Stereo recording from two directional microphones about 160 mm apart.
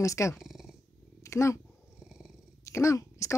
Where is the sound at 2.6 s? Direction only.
20° left (ahead or behind).